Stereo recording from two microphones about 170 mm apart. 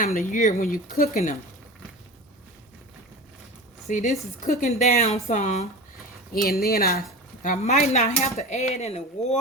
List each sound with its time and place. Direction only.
0.0 s speech: 50° left (ahead or behind)
3.8 s speech: 45° left (ahead or behind)
6.3 s speech: 60° left (ahead or behind)
7.4 s speech: 45° left (ahead or behind)